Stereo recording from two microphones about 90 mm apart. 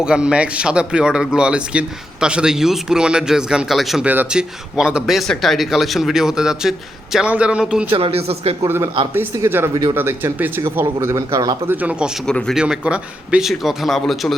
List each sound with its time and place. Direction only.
0.0 s speech: 10° right (ahead or behind)
4.0 s speech: 20° right (ahead or behind)
4.3 s a man's voice: 10° right (ahead or behind)
7.9 s speech: 90° right
8.6 s speech: 30° right (ahead or behind)
11.7 s speech: 15° right (ahead or behind)
12.2 s speech: 5° left (ahead or behind)
12.5 s speech: 10° right (ahead or behind)
13.5 s a man's voice: centre (ahead or behind)